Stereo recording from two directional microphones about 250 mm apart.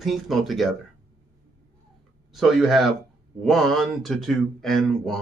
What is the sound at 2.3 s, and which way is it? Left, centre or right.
Speech, centre.